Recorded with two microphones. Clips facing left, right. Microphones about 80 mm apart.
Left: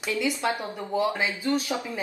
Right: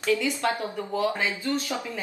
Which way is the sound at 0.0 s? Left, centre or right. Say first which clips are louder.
Right 2 dB; centre.